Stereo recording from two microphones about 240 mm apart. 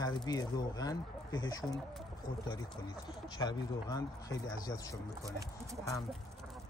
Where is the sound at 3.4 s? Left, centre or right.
Centre.